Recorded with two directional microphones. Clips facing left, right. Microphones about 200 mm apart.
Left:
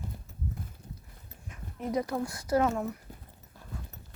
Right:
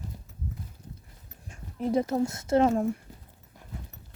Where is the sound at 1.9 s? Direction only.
25° right (ahead or behind).